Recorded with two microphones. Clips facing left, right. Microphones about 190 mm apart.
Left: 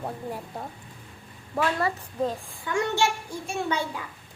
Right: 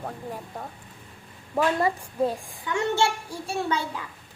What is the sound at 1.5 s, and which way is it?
A woman's voice, 15° right (ahead or behind).